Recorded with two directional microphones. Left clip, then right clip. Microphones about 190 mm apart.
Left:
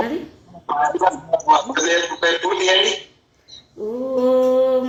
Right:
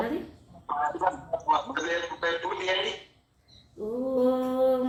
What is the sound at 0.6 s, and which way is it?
A woman's voice, 35° left (ahead or behind).